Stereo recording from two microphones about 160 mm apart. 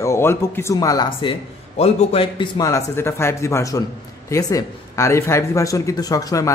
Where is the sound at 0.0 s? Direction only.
15° left (ahead or behind).